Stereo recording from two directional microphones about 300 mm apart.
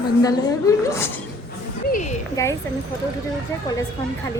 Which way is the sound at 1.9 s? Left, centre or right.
Left.